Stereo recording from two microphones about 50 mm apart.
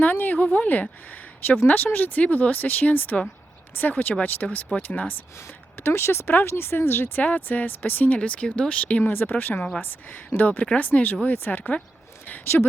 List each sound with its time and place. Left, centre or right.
0.0 s a sound: left
0.5 s speech: left
5.7 s speech: left
7.2 s speech: left
9.0 s speech: left
12.5 s speech: left